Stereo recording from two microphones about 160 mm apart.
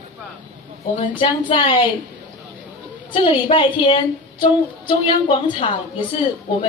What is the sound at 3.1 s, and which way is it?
A woman's voice, 30° left (ahead or behind).